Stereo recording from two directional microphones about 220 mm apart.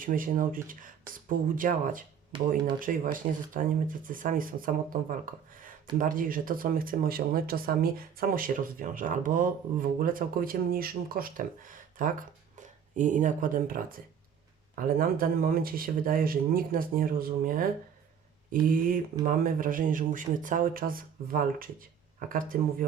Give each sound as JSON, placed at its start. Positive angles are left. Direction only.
{"t": 0.0, "sound": "speech", "side_deg": -40}
{"t": 18.7, "sound": "speech", "side_deg": -40}